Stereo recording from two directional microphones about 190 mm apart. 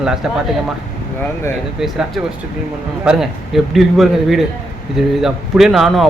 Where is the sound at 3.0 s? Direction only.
Centre (ahead or behind).